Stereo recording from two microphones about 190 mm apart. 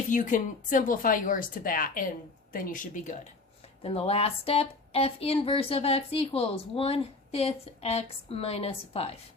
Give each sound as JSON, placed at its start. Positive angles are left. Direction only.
{"t": 0.1, "sound": "speech", "side_deg": 40}
{"t": 3.8, "sound": "speech", "side_deg": 30}